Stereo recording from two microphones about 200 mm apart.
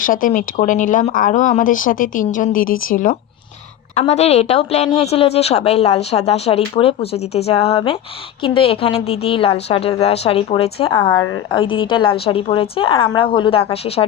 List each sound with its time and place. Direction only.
0.0 s a woman's voice: 40° left (ahead or behind)